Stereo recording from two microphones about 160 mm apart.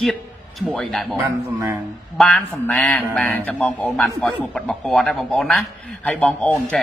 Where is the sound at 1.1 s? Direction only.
15° right (ahead or behind).